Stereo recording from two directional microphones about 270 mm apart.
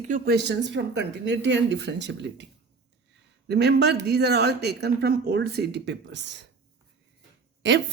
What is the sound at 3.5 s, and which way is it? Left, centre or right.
A woman's voice, right.